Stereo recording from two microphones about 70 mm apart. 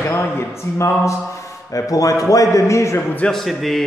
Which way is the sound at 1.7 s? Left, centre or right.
Left.